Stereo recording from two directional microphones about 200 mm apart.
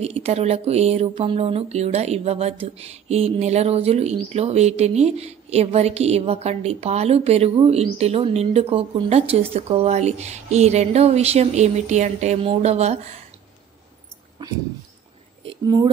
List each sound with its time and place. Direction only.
0.0 s bird: 30° right (ahead or behind)
15.4 s a woman's voice: 20° right (ahead or behind)